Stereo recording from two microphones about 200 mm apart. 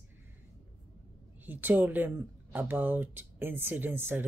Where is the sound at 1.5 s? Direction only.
10° right (ahead or behind).